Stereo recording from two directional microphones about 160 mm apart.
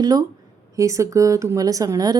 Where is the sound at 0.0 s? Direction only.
25° right (ahead or behind).